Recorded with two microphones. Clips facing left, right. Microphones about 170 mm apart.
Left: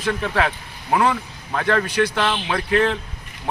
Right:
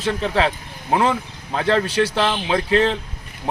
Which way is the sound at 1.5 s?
30° right (ahead or behind).